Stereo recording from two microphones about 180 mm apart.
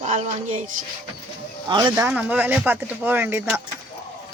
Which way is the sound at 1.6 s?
25° right (ahead or behind).